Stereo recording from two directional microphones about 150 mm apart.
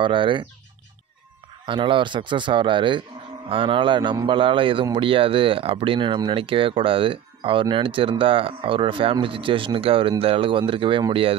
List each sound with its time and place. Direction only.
0.0 s a man's voice: 35° right (ahead or behind)
1.7 s a man's voice: 35° right (ahead or behind)